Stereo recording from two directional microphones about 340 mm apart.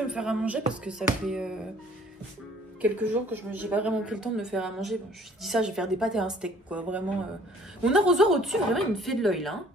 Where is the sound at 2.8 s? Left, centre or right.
Centre.